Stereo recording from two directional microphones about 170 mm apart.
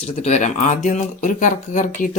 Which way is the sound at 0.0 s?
40° left (ahead or behind).